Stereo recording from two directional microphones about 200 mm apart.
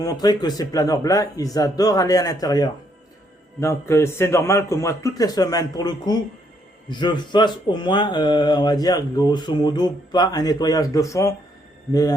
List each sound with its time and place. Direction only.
0.0 s a man's voice: 20° left (ahead or behind)